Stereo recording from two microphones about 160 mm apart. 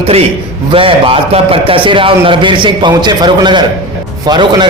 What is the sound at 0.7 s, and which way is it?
A man's voice, 35° right (ahead or behind).